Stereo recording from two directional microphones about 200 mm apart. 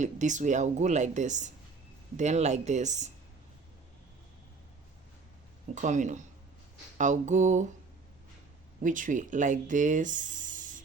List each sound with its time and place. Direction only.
0.0 s a woman's voice: 35° right (ahead or behind)
5.7 s a woman's voice: 35° right (ahead or behind)
8.8 s speech: 40° right (ahead or behind)